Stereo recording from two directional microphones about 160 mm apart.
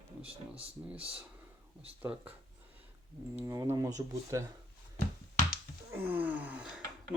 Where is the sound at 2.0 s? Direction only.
10° right (ahead or behind).